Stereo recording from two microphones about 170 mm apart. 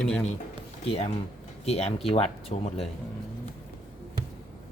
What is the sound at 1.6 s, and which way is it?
Speech, 40° left (ahead or behind).